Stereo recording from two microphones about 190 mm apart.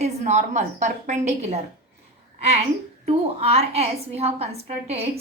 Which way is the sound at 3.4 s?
35° right (ahead or behind).